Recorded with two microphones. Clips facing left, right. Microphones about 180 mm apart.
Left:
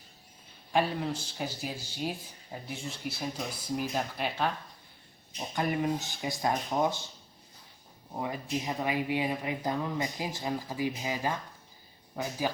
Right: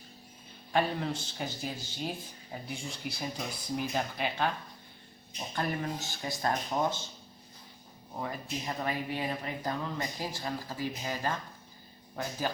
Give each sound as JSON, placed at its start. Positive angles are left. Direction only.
{"t": 0.7, "sound": "speech", "side_deg": 5}
{"t": 5.5, "sound": "speech", "side_deg": 15}
{"t": 8.1, "sound": "speech", "side_deg": 15}